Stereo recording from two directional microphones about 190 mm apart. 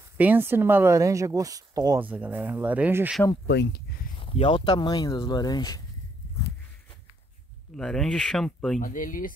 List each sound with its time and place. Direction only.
0.2 s speech: 10° right (ahead or behind)
2.0 s speech: 10° right (ahead or behind)
3.4 s speech: 65° left (ahead or behind)
4.2 s speech: 25° left (ahead or behind)
7.7 s speech: 5° left (ahead or behind)
8.7 s speech: 45° left (ahead or behind)